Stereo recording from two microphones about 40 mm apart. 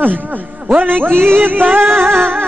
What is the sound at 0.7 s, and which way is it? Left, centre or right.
Music, right.